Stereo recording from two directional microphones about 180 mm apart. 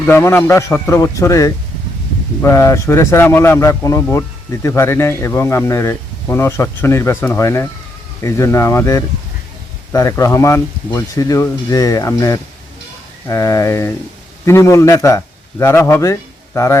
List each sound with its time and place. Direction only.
0.0 s a man's voice: 10° left (ahead or behind)